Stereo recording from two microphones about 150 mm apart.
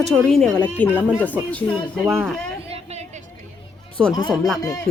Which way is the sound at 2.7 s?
45° right (ahead or behind).